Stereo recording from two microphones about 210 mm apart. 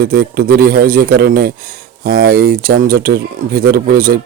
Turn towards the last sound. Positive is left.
turn(degrees=-45)  # may be behind; listen again after turning